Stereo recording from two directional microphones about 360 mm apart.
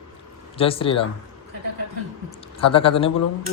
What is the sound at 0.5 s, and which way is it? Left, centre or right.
Speech, centre.